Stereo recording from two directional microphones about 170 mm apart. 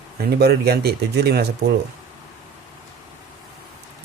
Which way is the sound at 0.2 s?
70° right (ahead or behind).